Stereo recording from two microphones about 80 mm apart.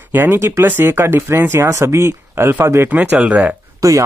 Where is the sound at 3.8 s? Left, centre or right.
Right.